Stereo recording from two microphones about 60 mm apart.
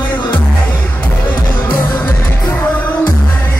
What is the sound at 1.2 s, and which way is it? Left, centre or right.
Music, left.